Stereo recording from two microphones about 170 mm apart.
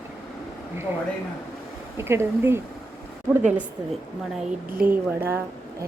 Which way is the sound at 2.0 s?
15° right (ahead or behind).